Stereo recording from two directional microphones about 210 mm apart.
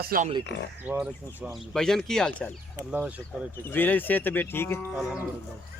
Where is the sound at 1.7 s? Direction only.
Centre (ahead or behind).